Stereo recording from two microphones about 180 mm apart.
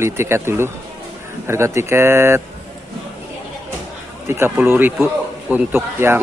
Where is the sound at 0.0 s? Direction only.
15° right (ahead or behind).